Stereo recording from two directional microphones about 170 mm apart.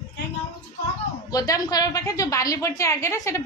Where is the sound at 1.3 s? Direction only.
20° left (ahead or behind).